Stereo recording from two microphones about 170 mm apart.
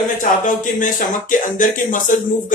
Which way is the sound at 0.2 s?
50° left (ahead or behind).